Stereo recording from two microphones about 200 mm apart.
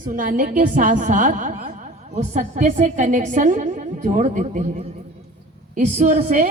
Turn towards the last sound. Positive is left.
turn(degrees=-35)  # may be behind; listen again after turning